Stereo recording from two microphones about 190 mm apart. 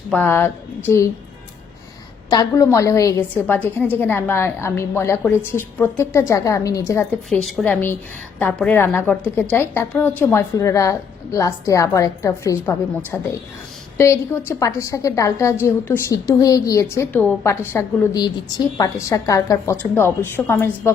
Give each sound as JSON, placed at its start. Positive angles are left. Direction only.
{"t": 0.1, "sound": "a woman's voice", "side_deg": 10}
{"t": 2.3, "sound": "a woman's voice", "side_deg": 20}
{"t": 7.3, "sound": "a woman's voice", "side_deg": 5}
{"t": 14.0, "sound": "a woman's voice", "side_deg": 15}